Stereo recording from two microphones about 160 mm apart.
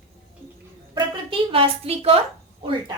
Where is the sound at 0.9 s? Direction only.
30° right (ahead or behind).